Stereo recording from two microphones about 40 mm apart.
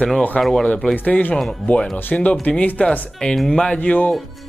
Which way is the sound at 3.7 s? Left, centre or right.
Left.